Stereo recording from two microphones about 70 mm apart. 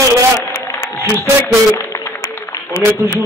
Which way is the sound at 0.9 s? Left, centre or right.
Left.